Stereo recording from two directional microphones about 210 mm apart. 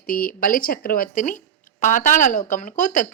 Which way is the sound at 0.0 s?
40° left (ahead or behind).